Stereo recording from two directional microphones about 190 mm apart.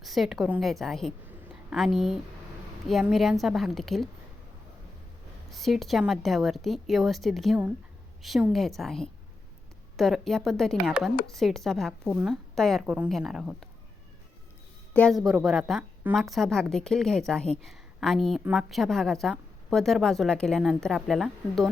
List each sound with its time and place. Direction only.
0.0 s a woman's voice: centre (ahead or behind)
5.5 s a woman's voice: centre (ahead or behind)
14.9 s a woman's voice: centre (ahead or behind)